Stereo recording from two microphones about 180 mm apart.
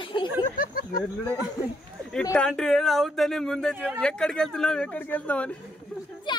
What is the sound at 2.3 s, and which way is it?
Speech, 5° left (ahead or behind).